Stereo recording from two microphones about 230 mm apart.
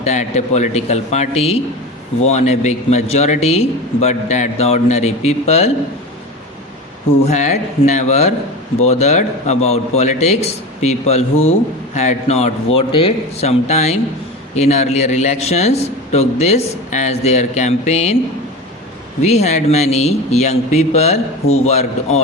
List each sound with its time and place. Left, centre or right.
0.0 s a man's voice: left
7.3 s a man's voice: left
19.2 s a man's voice: left